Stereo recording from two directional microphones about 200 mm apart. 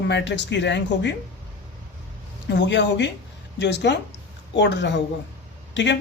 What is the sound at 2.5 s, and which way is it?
Speech, 65° left (ahead or behind).